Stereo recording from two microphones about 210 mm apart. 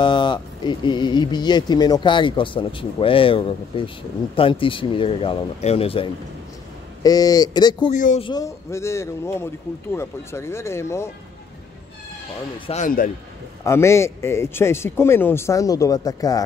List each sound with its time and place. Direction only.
0.0 s speech: 20° left (ahead or behind)
7.9 s speech: 35° left (ahead or behind)
8.3 s speech: 15° left (ahead or behind)
12.5 s speech: 25° left (ahead or behind)
12.8 s speech: 40° left (ahead or behind)
13.7 s speech: 15° left (ahead or behind)